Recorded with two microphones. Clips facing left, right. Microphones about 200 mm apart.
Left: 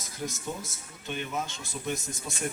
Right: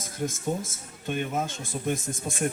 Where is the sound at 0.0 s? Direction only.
50° right (ahead or behind).